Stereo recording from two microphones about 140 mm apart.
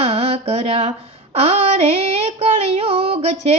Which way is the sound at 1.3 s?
45° right (ahead or behind).